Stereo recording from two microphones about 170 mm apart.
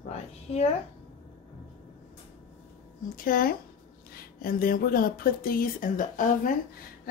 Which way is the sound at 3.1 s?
55° left (ahead or behind).